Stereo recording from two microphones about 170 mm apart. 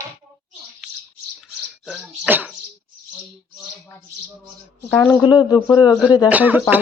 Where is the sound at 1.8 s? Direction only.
Centre (ahead or behind).